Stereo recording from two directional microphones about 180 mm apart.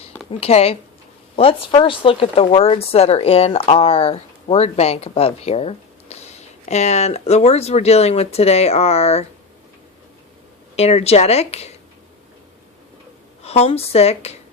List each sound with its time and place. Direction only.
0.3 s speech: 35° left (ahead or behind)
10.8 s speech: 35° left (ahead or behind)
13.4 s speech: 35° left (ahead or behind)